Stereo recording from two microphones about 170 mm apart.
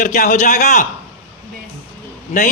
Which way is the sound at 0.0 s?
50° left (ahead or behind).